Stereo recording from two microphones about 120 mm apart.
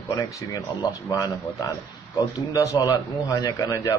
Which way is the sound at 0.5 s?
25° left (ahead or behind).